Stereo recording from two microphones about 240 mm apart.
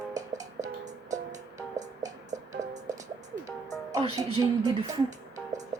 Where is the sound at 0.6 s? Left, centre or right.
Right.